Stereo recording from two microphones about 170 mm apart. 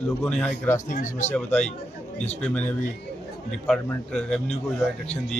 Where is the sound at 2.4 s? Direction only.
5° left (ahead or behind).